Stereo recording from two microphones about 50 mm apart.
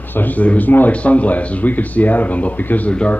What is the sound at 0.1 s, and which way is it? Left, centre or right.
A man's voice, left.